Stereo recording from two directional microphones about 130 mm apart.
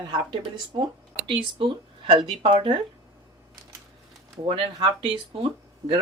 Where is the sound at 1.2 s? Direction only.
40° right (ahead or behind).